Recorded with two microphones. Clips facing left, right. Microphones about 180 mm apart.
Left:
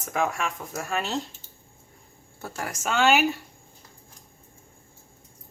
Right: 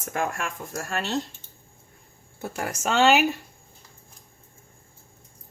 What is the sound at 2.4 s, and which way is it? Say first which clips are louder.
Speech: right 3 dB; 25° right (ahead or behind).